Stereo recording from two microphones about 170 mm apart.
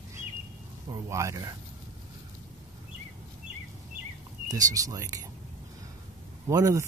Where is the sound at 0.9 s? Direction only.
20° right (ahead or behind).